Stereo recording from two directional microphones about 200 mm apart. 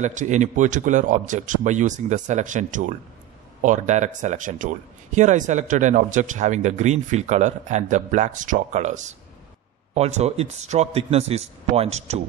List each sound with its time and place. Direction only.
0.0 s speech: 35° right (ahead or behind)